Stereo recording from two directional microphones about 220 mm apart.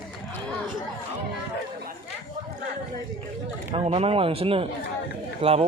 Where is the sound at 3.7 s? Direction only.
25° right (ahead or behind).